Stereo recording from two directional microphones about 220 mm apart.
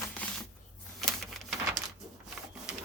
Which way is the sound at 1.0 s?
Centre (ahead or behind).